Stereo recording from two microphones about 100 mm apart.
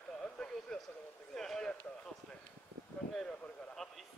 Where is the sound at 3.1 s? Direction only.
5° left (ahead or behind).